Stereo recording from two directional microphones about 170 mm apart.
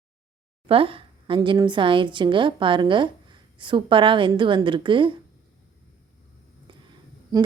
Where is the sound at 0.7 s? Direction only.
30° right (ahead or behind).